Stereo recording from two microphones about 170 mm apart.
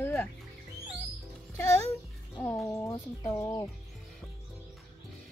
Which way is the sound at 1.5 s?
15° left (ahead or behind).